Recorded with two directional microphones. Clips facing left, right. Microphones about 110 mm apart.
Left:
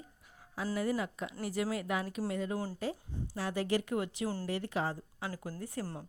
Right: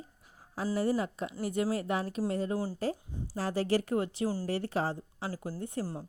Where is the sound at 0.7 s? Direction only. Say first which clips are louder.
Right 4 dB; 35° right (ahead or behind).